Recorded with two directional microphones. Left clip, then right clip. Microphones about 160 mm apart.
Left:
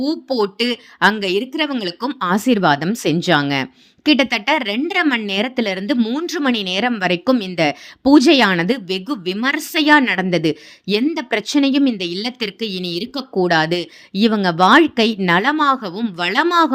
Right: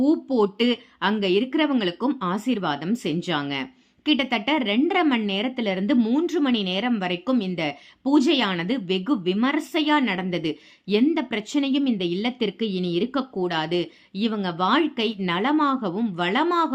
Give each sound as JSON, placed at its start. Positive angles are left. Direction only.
{"t": 0.0, "sound": "speech", "side_deg": 40}